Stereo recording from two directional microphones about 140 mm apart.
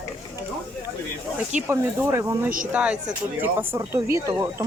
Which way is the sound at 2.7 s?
5° right (ahead or behind).